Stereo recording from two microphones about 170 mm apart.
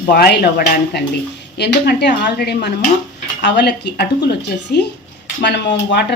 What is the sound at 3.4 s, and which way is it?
Speech, 90° left.